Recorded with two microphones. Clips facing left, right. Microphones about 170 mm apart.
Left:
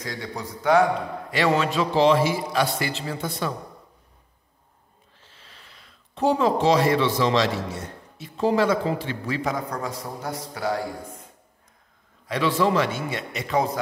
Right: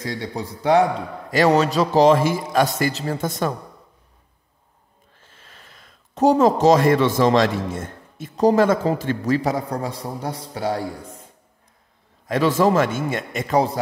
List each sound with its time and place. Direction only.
0.0 s speech: 25° right (ahead or behind)
1.3 s a man's voice: 40° right (ahead or behind)
5.2 s speech: 50° right (ahead or behind); by 10.8 s 30° right (ahead or behind)
12.3 s a man's voice: 45° right (ahead or behind)